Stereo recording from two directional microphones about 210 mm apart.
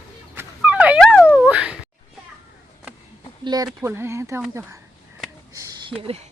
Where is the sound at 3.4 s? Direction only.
20° right (ahead or behind).